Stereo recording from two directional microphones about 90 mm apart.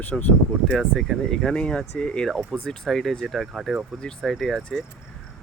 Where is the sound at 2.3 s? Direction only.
5° right (ahead or behind).